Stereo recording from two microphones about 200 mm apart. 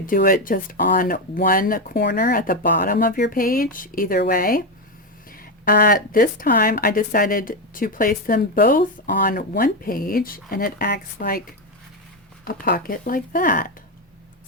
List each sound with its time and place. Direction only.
0.0 s speech: 45° left (ahead or behind)
12.5 s speech: 45° left (ahead or behind)